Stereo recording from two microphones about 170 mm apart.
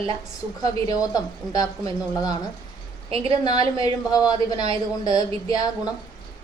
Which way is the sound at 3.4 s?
25° left (ahead or behind).